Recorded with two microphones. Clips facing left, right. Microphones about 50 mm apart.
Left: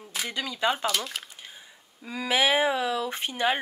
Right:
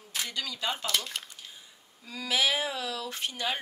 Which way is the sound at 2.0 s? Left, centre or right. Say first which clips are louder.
Left 4 dB; left.